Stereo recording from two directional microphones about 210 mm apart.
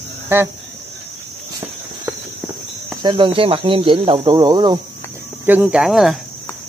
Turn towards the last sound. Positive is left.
turn(degrees=0)  # may be behind; listen again after turning